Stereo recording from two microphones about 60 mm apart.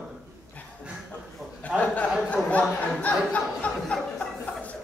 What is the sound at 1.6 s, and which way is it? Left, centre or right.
Speech, left.